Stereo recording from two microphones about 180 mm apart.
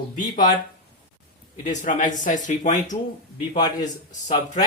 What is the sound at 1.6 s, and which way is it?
Speech, 45° left (ahead or behind).